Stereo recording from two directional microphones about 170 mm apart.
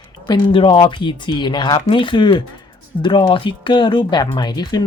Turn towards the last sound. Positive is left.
turn(degrees=25)  # may be behind; listen again after turning